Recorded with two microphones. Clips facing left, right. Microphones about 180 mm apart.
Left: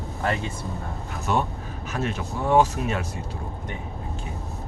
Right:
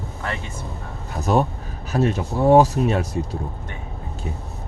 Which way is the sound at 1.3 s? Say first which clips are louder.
Right 6 dB; 40° right (ahead or behind).